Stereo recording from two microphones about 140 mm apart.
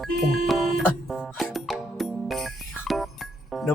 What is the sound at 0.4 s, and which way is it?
Music, centre (ahead or behind).